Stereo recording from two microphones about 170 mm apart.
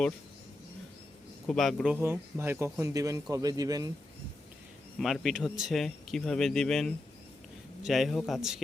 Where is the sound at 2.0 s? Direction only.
15° right (ahead or behind).